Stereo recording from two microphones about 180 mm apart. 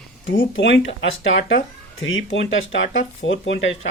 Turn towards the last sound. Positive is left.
turn(degrees=90)